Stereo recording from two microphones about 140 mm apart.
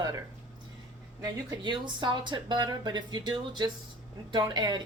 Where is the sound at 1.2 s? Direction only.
30° right (ahead or behind).